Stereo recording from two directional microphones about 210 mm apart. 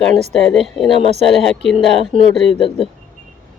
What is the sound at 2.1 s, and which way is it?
Speech, 40° right (ahead or behind).